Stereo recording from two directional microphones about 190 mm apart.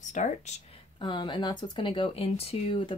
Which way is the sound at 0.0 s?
40° left (ahead or behind).